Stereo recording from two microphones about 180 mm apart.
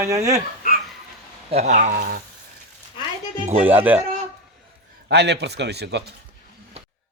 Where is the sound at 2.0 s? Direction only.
55° right (ahead or behind).